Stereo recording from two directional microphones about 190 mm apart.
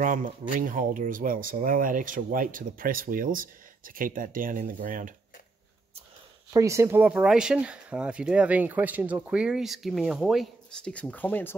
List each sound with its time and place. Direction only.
0.0 s speech: 45° right (ahead or behind)
6.5 s speech: 15° right (ahead or behind); by 11.5 s 10° left (ahead or behind)